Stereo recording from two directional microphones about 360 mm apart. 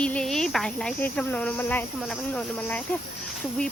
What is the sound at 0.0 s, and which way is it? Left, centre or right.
Speech, centre.